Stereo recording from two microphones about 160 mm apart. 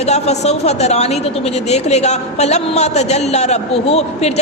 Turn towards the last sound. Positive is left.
turn(degrees=40)  # may be behind; listen again after turning